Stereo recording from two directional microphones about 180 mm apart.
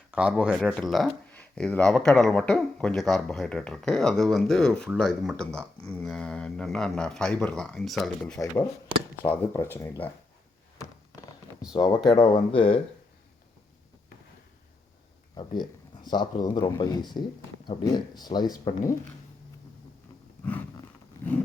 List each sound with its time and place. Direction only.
0.1 s speech: 5° right (ahead or behind); by 10.1 s 15° left (ahead or behind)
11.7 s speech: 25° left (ahead or behind)
16.0 s speech: 25° left (ahead or behind)